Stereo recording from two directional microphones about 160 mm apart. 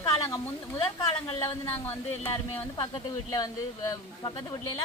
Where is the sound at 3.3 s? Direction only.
20° left (ahead or behind).